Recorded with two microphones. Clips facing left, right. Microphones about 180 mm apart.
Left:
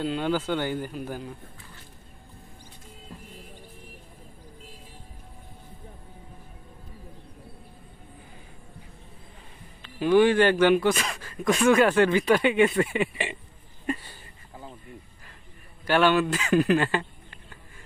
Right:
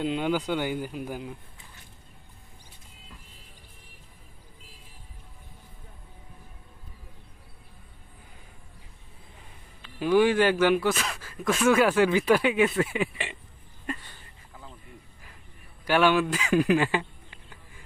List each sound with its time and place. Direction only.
0.0 s speech: 15° right (ahead or behind)
9.8 s speech: 5° right (ahead or behind)
14.5 s a sound: 30° left (ahead or behind)
15.9 s speech: 10° right (ahead or behind)